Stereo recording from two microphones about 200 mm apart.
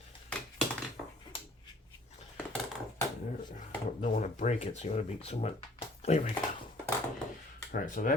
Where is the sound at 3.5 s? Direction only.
40° left (ahead or behind).